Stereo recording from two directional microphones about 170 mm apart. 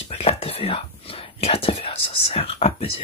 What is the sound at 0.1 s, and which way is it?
Whispering, 35° left (ahead or behind).